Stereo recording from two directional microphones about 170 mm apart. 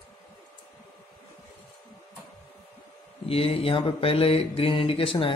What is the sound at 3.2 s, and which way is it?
Mantra, 35° left (ahead or behind).